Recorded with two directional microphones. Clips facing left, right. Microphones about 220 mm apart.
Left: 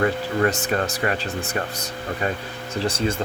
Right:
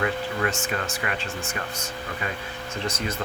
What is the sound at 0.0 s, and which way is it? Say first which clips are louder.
Speech: left 5 dB; 40° left (ahead or behind).